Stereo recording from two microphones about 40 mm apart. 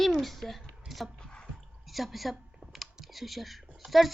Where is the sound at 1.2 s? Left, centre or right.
Left.